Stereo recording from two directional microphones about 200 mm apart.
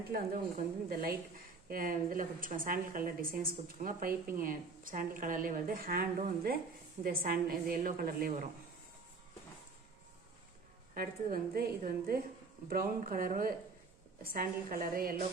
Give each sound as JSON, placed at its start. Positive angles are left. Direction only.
{"t": 0.9, "sound": "a woman's voice", "side_deg": -50}
{"t": 10.9, "sound": "a woman's voice", "side_deg": -45}